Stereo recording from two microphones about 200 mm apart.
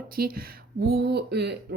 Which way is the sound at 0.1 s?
45° right (ahead or behind).